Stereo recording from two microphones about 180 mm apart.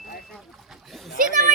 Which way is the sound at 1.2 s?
45° right (ahead or behind).